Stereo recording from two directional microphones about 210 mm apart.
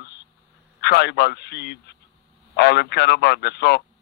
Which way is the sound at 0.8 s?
50° left (ahead or behind).